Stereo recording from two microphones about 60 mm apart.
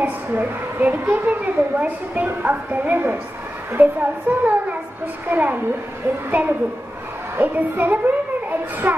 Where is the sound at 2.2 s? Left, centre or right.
Right.